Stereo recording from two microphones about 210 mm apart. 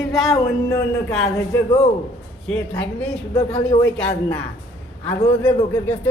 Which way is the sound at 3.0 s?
5° left (ahead or behind).